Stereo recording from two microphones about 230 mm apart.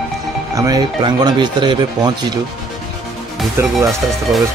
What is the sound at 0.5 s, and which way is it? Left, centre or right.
Speech, centre.